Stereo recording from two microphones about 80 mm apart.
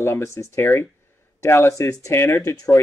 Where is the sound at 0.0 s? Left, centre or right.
Left.